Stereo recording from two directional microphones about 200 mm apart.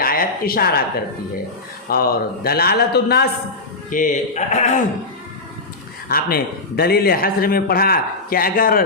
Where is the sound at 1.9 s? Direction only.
50° left (ahead or behind).